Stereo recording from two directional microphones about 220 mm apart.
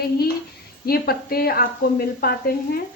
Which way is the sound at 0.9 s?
45° left (ahead or behind).